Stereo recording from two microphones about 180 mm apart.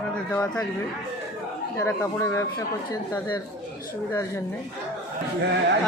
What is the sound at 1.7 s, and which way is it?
Speech, 15° left (ahead or behind).